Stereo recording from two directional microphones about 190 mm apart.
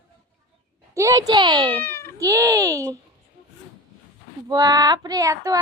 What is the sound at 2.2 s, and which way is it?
Speech, 15° right (ahead or behind).